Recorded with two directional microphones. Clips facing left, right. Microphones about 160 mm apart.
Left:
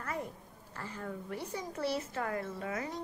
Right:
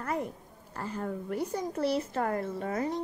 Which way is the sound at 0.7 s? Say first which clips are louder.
Right 7 dB; 40° right (ahead or behind).